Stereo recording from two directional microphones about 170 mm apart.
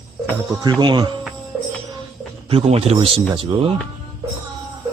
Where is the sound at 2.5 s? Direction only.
35° right (ahead or behind).